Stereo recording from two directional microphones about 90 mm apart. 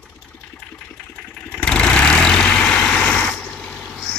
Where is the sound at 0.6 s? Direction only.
10° left (ahead or behind).